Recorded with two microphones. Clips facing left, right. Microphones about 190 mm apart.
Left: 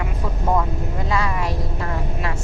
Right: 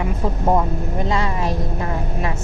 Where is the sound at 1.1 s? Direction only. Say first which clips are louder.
Right 1 dB; 25° right (ahead or behind).